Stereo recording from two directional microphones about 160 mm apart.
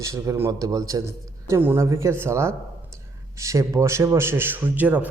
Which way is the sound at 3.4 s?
20° right (ahead or behind).